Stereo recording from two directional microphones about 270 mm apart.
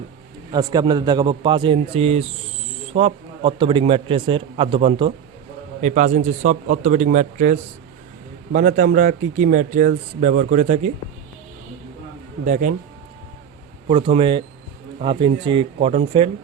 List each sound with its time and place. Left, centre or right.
0.5 s a man's voice: centre
12.5 s speech: right
13.8 s speech: right